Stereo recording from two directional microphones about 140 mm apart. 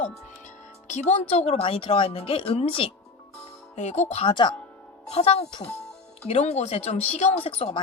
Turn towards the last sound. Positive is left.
turn(degrees=45)  # may be behind; listen again after turning